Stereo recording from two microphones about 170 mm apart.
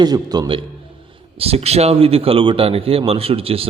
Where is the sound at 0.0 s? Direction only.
25° right (ahead or behind).